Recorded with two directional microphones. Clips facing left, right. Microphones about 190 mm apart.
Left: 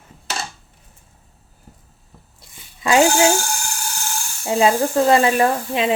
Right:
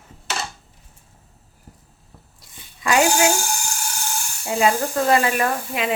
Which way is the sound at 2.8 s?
25° left (ahead or behind).